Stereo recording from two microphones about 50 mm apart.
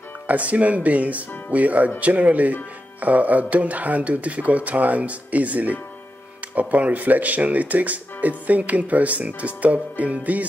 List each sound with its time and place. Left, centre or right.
0.3 s speech: right